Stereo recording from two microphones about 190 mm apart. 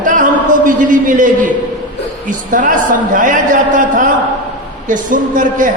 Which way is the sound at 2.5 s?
45° right (ahead or behind).